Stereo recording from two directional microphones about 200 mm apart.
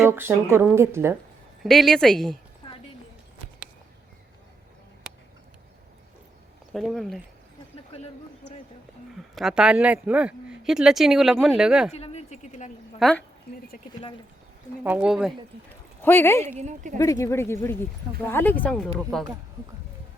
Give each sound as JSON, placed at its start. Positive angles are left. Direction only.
{"t": 0.0, "sound": "a woman's voice", "side_deg": -10}
{"t": 1.6, "sound": "speech", "side_deg": 0}
{"t": 2.6, "sound": "clip-clop", "side_deg": 25}
{"t": 6.7, "sound": "speech", "side_deg": 0}
{"t": 9.1, "sound": "speech", "side_deg": 0}
{"t": 11.9, "sound": "a sound", "side_deg": 30}
{"t": 13.0, "sound": "speech", "side_deg": 0}
{"t": 14.8, "sound": "speech", "side_deg": -5}
{"t": 16.0, "sound": "speech", "side_deg": 10}
{"t": 16.5, "sound": "speech", "side_deg": -35}
{"t": 17.0, "sound": "speech", "side_deg": 15}